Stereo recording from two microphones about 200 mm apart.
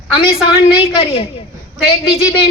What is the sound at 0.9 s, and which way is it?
Speech, 25° left (ahead or behind).